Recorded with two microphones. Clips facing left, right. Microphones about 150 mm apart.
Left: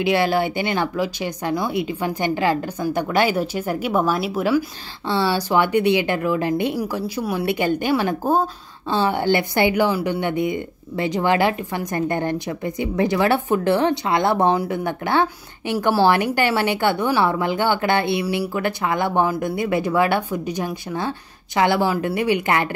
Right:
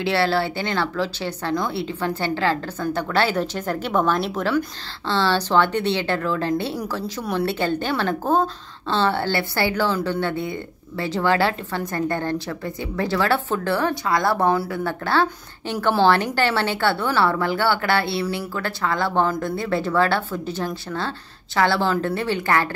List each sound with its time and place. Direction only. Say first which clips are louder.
0.0 s a woman's voice: left 2 dB; 15° left (ahead or behind)